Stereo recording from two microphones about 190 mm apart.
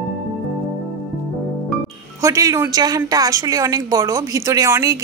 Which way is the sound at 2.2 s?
15° right (ahead or behind).